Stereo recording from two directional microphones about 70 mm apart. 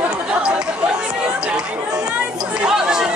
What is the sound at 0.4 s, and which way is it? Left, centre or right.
Chatter, centre.